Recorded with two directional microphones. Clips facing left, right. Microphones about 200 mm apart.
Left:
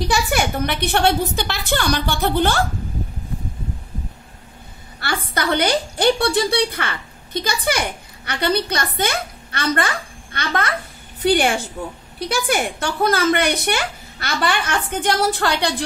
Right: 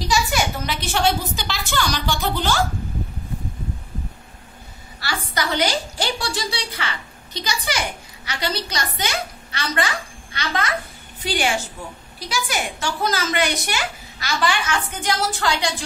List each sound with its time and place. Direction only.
0.0 s a woman's voice: 60° left (ahead or behind)
5.0 s a woman's voice: 55° left (ahead or behind)